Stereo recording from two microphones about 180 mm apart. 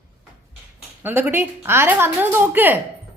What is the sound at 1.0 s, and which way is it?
A woman's voice, 10° right (ahead or behind).